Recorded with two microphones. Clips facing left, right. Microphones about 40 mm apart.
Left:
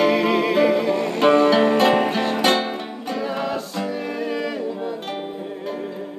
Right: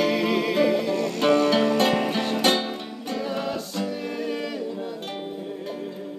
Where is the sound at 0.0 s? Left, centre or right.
Centre; by 1.8 s left.